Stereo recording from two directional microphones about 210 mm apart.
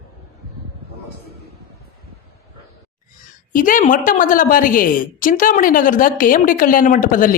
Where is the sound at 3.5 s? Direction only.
40° left (ahead or behind).